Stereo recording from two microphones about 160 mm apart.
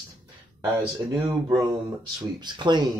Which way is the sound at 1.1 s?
25° right (ahead or behind).